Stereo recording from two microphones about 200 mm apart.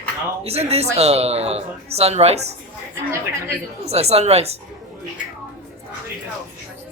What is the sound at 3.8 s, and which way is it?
Speech, 30° right (ahead or behind).